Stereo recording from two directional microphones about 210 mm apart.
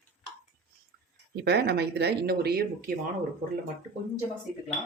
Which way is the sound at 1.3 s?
50° right (ahead or behind).